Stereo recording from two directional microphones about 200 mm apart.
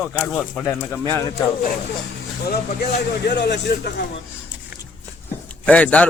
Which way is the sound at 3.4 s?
55° left (ahead or behind).